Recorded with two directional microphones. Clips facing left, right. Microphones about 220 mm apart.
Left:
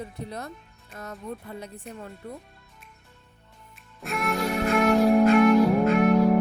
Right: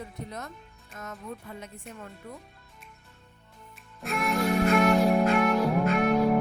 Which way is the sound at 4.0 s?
Centre (ahead or behind).